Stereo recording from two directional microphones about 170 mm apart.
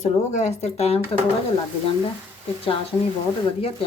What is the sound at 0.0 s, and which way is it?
Speech, 40° left (ahead or behind).